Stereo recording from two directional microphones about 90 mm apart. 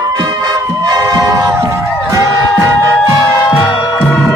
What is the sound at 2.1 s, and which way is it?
Music, 35° right (ahead or behind).